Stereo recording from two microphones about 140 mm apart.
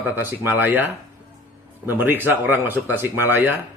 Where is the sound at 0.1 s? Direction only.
15° right (ahead or behind).